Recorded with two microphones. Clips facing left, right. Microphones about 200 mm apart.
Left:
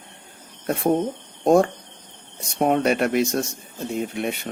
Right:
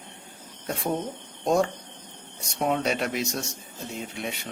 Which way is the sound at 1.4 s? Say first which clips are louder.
Left 7 dB; 55° left (ahead or behind).